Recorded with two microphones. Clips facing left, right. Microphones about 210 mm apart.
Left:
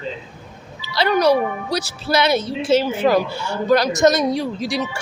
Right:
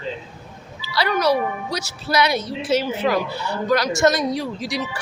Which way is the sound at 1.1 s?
35° left (ahead or behind).